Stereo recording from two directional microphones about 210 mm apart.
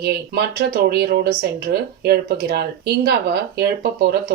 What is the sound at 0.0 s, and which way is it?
Speech, 50° right (ahead or behind).